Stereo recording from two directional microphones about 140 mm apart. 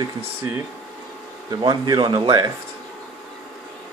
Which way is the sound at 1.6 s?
30° right (ahead or behind).